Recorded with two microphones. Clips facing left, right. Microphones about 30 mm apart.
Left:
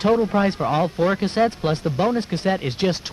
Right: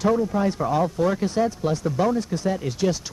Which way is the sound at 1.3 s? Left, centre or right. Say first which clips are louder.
Left 3 dB; left.